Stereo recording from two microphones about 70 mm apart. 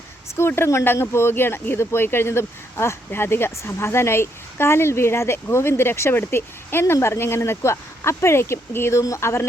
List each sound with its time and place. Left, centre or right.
0.3 s speech: left
9.0 s speech: left